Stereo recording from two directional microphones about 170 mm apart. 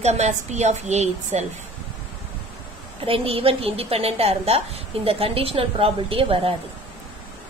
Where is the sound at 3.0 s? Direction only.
30° right (ahead or behind).